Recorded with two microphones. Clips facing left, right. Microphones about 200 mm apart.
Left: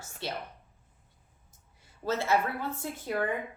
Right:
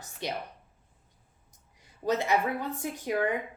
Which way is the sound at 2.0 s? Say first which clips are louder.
Right 1 dB; 15° right (ahead or behind).